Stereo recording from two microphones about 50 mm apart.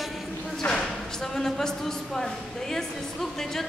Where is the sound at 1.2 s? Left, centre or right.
Centre.